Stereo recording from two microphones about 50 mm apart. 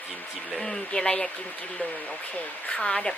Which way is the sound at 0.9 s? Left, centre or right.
Left.